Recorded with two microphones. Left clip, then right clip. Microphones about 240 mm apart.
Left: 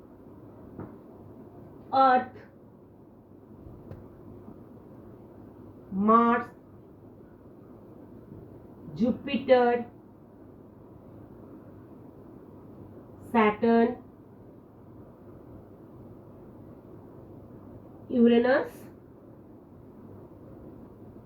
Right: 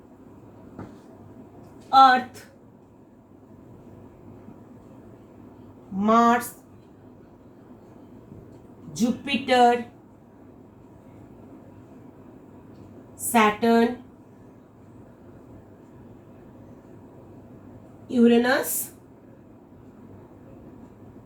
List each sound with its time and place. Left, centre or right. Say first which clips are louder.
1.9 s a woman's voice: right 7 dB; right
6.0 s a woman's voice: right 3 dB; right
8.9 s a woman's voice: right 3 dB; right
13.3 s a woman's voice: right 4 dB; right
18.1 s a woman's voice: right 3 dB; right